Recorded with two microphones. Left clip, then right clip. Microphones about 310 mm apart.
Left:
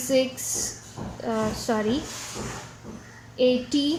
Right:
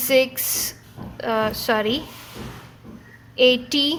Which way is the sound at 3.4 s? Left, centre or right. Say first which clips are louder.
Right 5 dB; right.